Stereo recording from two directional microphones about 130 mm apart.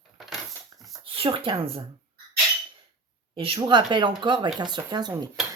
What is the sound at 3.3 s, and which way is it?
Speech, 45° right (ahead or behind).